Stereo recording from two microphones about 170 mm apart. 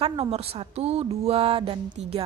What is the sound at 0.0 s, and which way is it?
A woman's voice, 35° right (ahead or behind).